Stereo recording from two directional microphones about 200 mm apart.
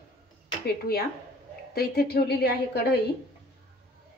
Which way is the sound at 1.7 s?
50° left (ahead or behind).